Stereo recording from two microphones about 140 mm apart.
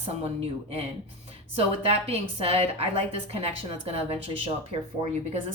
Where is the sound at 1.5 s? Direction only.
45° right (ahead or behind).